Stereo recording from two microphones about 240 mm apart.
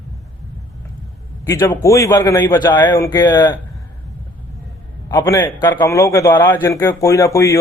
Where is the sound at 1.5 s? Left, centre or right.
Centre.